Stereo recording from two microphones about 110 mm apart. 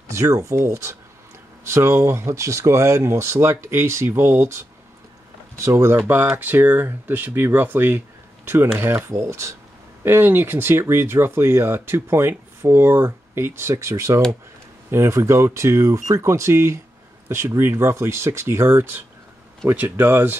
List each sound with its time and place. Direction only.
0.1 s speech: 30° right (ahead or behind)